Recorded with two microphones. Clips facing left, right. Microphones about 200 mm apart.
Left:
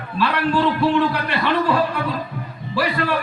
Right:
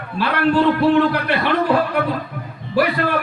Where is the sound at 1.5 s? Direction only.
55° right (ahead or behind).